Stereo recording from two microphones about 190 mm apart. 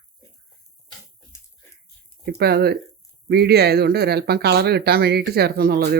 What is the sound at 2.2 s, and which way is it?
Speech, 55° right (ahead or behind).